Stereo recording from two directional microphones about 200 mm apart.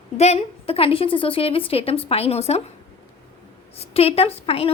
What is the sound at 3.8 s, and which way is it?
Speech, 30° left (ahead or behind).